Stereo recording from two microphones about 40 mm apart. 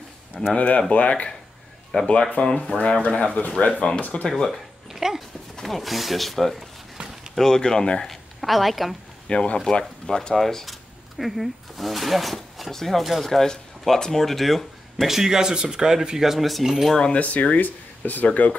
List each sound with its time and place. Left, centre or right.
0.6 s speech: left
4.3 s speech: centre
4.8 s dog: centre
5.6 s speech: centre
7.0 s a sound: right
7.3 s speech: centre
8.1 s a woman's voice: centre
9.3 s speech: left; by 15.0 s centre
15.0 s speech: centre
17.1 s speech: left